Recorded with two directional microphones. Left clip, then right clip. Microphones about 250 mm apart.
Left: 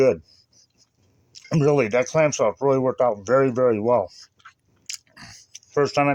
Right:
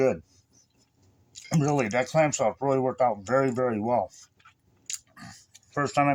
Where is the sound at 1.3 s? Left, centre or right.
Left.